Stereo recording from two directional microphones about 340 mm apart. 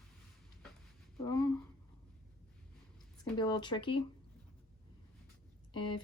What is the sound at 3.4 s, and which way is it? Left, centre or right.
Speech, centre.